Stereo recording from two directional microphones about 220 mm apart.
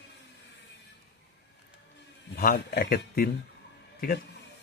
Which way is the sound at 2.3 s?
45° left (ahead or behind).